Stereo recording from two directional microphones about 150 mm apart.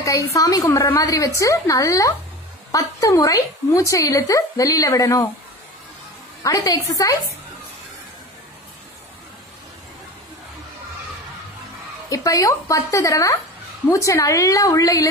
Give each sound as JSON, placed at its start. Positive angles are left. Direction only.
{"t": 0.0, "sound": "a woman's voice", "side_deg": 20}
{"t": 6.4, "sound": "a woman's voice", "side_deg": 25}
{"t": 12.1, "sound": "a woman's voice", "side_deg": 20}